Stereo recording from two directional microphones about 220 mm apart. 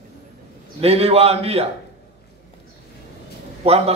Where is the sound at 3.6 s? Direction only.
25° right (ahead or behind).